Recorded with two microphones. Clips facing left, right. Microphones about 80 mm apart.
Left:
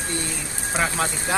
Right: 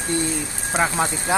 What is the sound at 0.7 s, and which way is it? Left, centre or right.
Speech, centre.